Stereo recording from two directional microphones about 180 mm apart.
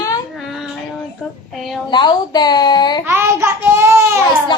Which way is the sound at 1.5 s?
Centre (ahead or behind).